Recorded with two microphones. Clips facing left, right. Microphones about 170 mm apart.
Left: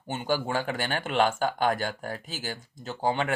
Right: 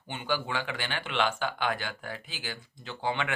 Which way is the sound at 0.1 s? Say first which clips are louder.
Left 4 dB; 40° left (ahead or behind).